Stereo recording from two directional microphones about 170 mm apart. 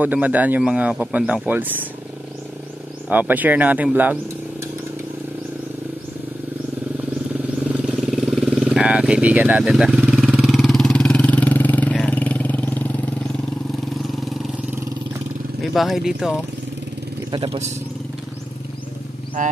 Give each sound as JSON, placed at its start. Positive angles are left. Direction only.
{"t": 0.0, "sound": "speech", "side_deg": -10}
{"t": 3.1, "sound": "speech", "side_deg": -10}
{"t": 7.0, "sound": "vehicle", "side_deg": -10}
{"t": 14.2, "sound": "vehicle", "side_deg": 0}
{"t": 15.6, "sound": "speech", "side_deg": 0}
{"t": 17.3, "sound": "speech", "side_deg": -30}